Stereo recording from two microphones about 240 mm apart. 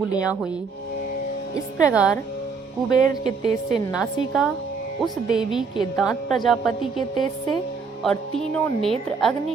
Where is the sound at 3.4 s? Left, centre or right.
Right.